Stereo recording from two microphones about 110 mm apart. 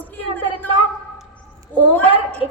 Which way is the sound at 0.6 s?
15° left (ahead or behind).